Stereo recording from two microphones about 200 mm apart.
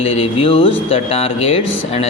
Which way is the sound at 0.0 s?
30° left (ahead or behind).